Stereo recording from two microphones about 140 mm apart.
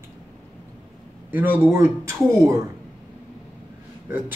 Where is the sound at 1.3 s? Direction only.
10° right (ahead or behind).